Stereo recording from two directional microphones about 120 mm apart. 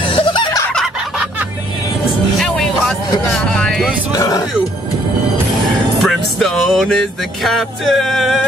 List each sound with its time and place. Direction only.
0.0 s a sound: 45° left (ahead or behind)
2.3 s music: 5° left (ahead or behind)
3.3 s vehicle: 5° left (ahead or behind)
6.0 s music: centre (ahead or behind)